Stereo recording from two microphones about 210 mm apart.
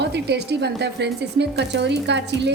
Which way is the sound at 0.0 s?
55° right (ahead or behind).